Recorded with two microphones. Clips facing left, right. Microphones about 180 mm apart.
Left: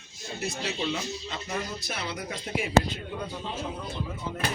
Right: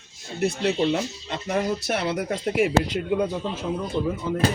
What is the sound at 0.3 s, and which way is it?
Speech, 60° right (ahead or behind).